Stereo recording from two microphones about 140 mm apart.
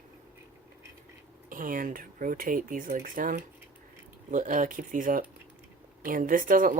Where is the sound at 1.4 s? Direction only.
75° right (ahead or behind).